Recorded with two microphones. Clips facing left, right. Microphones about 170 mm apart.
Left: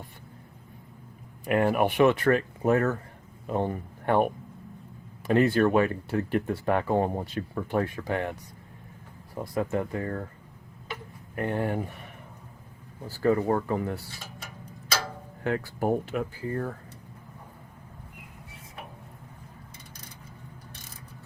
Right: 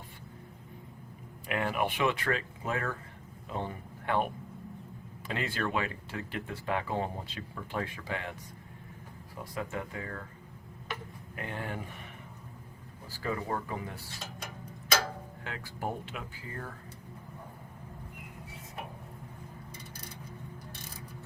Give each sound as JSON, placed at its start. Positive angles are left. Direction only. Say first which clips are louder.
{"t": 1.5, "sound": "speech", "louder": "left 8 dB", "side_deg": 45}
{"t": 5.3, "sound": "speech", "louder": "left 12 dB", "side_deg": 50}
{"t": 9.6, "sound": "speech", "louder": "left 9 dB", "side_deg": 50}
{"t": 11.3, "sound": "speech", "louder": "left 10 dB", "side_deg": 50}
{"t": 13.2, "sound": "speech", "louder": "left 10 dB", "side_deg": 50}
{"t": 15.4, "sound": "speech", "louder": "left 11 dB", "side_deg": 50}